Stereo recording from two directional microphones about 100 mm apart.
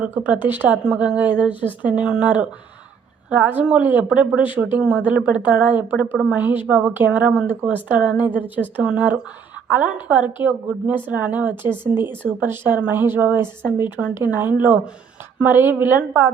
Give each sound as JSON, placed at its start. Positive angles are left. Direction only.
{"t": 0.0, "sound": "a woman's voice", "side_deg": -20}